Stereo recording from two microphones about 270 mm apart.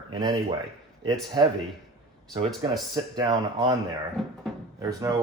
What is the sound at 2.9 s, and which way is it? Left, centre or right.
Speech, centre.